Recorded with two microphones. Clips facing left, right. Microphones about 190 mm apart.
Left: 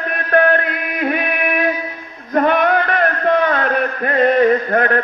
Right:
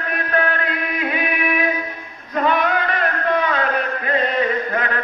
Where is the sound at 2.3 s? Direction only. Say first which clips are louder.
Left 5 dB; 55° left (ahead or behind).